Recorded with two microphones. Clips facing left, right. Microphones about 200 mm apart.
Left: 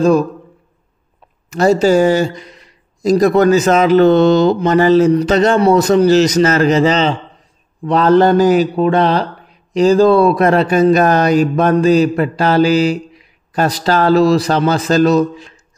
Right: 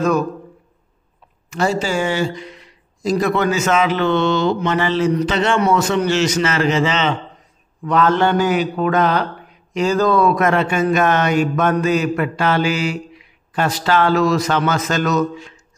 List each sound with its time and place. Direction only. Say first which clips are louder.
1.5 s a man's voice: left 8 dB; 40° left (ahead or behind)